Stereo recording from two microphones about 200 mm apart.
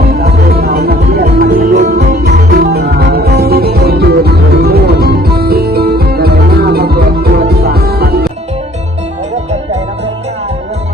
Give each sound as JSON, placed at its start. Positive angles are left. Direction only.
{"t": 0.1, "sound": "music", "side_deg": -50}